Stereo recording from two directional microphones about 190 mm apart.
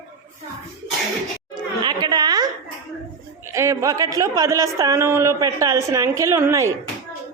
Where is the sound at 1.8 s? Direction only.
25° right (ahead or behind).